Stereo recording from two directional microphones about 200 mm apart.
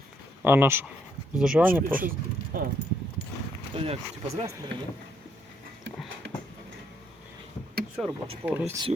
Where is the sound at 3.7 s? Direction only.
30° right (ahead or behind).